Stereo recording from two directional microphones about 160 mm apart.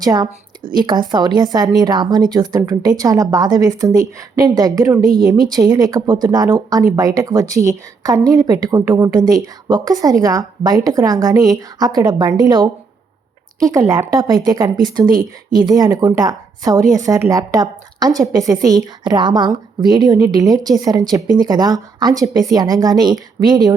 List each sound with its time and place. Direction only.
0.0 s a woman's voice: 25° right (ahead or behind)